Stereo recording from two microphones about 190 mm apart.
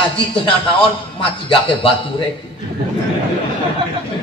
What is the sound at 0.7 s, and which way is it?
A man's voice, 25° left (ahead or behind).